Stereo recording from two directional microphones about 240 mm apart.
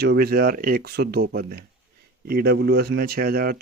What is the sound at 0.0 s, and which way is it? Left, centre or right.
A man's voice, right.